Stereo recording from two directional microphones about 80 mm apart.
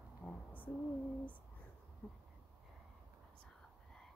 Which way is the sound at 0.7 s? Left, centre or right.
Left.